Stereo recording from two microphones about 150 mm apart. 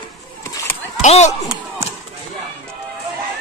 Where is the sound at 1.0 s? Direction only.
50° left (ahead or behind).